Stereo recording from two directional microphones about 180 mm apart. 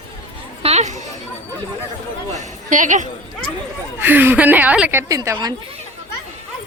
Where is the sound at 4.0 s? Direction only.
10° right (ahead or behind).